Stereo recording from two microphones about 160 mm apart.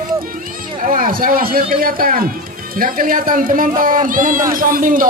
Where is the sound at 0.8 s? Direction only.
60° right (ahead or behind).